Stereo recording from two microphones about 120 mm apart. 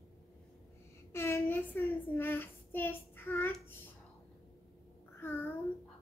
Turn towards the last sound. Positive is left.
turn(degrees=20)  # may be behind; listen again after turning